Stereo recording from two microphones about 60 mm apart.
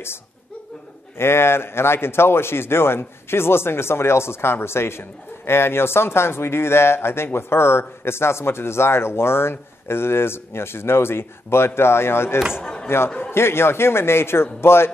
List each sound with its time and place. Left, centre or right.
1.1 s a man's voice: left